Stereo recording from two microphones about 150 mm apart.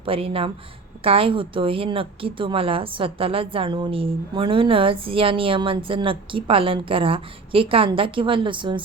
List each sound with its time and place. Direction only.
0.0 s a woman's voice: 40° right (ahead or behind)